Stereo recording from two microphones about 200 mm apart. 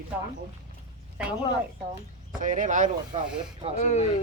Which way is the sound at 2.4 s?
40° right (ahead or behind).